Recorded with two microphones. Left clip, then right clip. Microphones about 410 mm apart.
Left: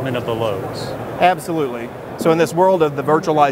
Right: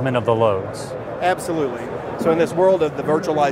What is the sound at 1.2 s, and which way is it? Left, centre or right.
Speech, left.